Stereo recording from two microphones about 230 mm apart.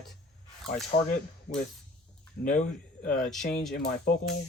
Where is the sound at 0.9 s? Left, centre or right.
Left.